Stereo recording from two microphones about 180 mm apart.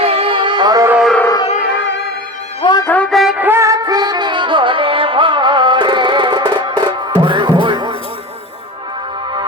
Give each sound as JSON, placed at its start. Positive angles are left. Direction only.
{"t": 0.0, "sound": "music", "side_deg": -30}
{"t": 0.9, "sound": "a sound", "side_deg": -5}
{"t": 1.6, "sound": "music", "side_deg": 75}
{"t": 2.6, "sound": "music", "side_deg": 25}
{"t": 2.8, "sound": "music", "side_deg": 10}